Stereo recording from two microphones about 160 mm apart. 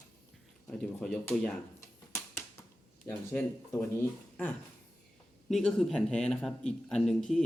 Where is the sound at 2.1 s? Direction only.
15° left (ahead or behind).